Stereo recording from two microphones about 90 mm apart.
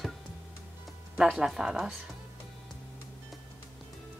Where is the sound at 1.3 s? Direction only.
5° right (ahead or behind).